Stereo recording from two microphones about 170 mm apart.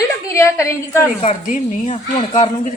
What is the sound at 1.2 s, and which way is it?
A woman's voice, 45° left (ahead or behind).